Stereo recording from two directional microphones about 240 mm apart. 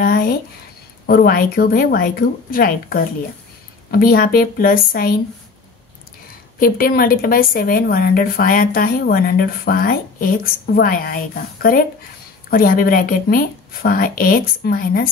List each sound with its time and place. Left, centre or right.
0.0 s a sound: left
1.0 s speech: left
6.6 s speech: left